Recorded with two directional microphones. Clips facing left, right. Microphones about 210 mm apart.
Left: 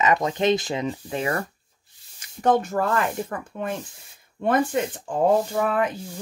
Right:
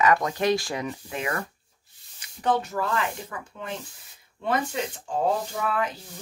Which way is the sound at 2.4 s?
45° left (ahead or behind).